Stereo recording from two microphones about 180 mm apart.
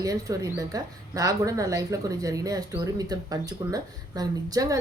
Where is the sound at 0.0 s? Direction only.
20° right (ahead or behind).